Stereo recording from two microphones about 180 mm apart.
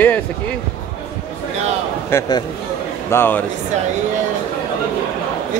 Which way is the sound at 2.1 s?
20° left (ahead or behind).